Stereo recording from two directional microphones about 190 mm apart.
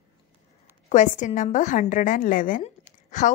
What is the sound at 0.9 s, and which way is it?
A woman's voice, 40° left (ahead or behind).